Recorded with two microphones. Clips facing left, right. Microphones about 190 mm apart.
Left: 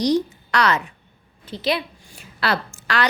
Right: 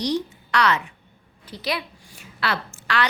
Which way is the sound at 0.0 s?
40° left (ahead or behind).